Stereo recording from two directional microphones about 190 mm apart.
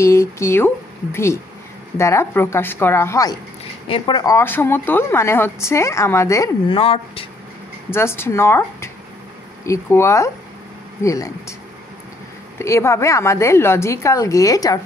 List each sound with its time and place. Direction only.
0.0 s a woman's voice: 15° left (ahead or behind)
6.7 s speech: 30° left (ahead or behind)
7.9 s a woman's voice: 10° left (ahead or behind)
12.5 s a woman's voice: 15° left (ahead or behind)